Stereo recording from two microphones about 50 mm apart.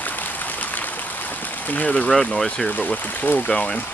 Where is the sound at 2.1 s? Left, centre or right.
Centre.